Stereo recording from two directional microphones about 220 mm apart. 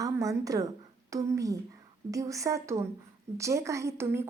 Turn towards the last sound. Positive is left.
turn(degrees=-10)  # may be behind; listen again after turning